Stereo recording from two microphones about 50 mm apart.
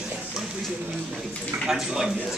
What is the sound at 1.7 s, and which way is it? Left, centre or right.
Speech, centre.